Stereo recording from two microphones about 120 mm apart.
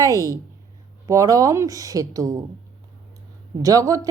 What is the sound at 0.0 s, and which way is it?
A woman's voice, 30° right (ahead or behind).